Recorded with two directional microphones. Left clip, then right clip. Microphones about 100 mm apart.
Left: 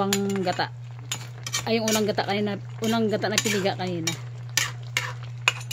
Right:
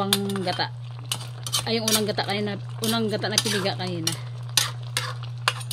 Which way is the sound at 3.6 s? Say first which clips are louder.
Left 1 dB; 40° left (ahead or behind).